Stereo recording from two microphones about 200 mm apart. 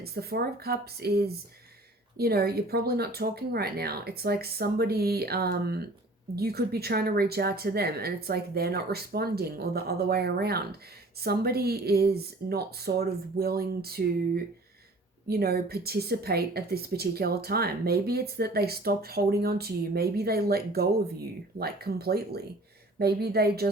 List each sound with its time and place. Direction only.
0.0 s speech: 50° right (ahead or behind)
15.3 s speech: 50° right (ahead or behind)